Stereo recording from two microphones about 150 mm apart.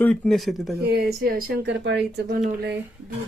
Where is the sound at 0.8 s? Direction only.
90° right.